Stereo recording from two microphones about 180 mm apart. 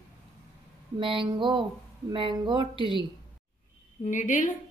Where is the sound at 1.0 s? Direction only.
30° right (ahead or behind).